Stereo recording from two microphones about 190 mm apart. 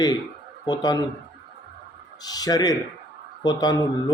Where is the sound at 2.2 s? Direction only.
20° left (ahead or behind).